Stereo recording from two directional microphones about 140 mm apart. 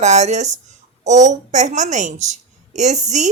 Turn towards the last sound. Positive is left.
turn(degrees=-55)  # may be behind; listen again after turning